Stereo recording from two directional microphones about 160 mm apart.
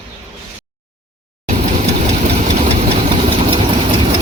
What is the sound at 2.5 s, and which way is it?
Engine, 40° right (ahead or behind).